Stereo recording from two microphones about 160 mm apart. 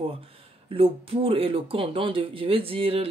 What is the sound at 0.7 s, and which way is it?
Speech, 35° right (ahead or behind).